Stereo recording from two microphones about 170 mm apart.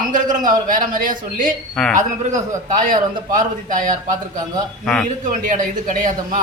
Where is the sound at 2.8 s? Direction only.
50° right (ahead or behind).